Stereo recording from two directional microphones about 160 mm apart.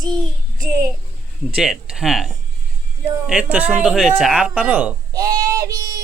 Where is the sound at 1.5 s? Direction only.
5° right (ahead or behind).